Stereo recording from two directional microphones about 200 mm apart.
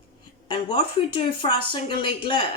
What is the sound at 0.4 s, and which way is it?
Speech, 25° left (ahead or behind).